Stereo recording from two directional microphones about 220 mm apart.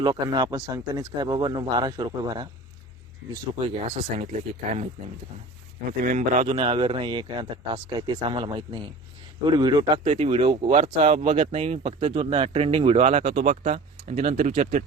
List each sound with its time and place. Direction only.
0.0 s speech: 20° right (ahead or behind)
3.6 s speech: 30° right (ahead or behind)
6.0 s speech: 35° right (ahead or behind)